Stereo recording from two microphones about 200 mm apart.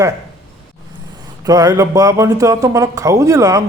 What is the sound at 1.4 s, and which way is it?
Speech, 20° right (ahead or behind).